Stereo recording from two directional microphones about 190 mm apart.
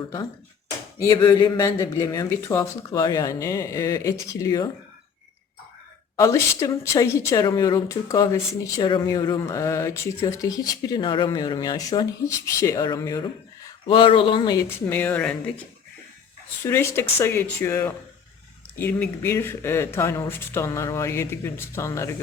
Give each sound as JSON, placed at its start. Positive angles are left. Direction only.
{"t": 0.9, "sound": "speech", "side_deg": 20}
{"t": 6.1, "sound": "speech", "side_deg": 15}
{"t": 13.8, "sound": "speech", "side_deg": 25}
{"t": 16.6, "sound": "speech", "side_deg": 15}